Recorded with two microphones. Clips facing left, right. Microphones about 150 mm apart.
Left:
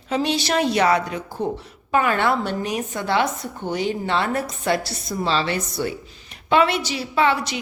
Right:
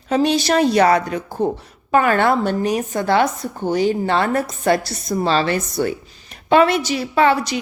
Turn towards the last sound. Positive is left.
turn(degrees=-40)  # may be behind; listen again after turning